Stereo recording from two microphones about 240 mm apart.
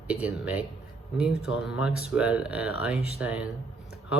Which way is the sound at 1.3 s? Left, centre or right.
Left.